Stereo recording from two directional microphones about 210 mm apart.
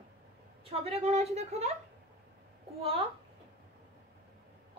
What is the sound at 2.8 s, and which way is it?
Speech, 25° right (ahead or behind).